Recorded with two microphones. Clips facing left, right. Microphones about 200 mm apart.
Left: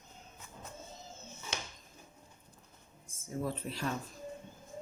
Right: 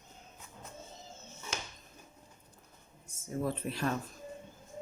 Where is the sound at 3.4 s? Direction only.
55° right (ahead or behind).